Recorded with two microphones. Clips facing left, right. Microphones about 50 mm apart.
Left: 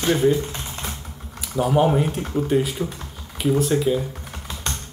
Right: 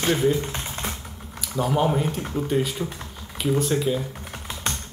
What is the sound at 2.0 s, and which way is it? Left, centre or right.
Speech, centre.